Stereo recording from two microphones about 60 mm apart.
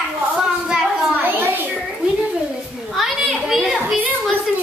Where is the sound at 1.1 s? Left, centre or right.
Right.